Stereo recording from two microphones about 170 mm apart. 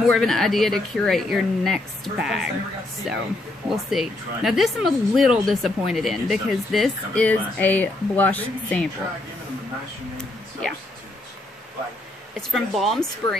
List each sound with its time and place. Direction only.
0.0 s speech: centre (ahead or behind)
12.4 s speech: centre (ahead or behind)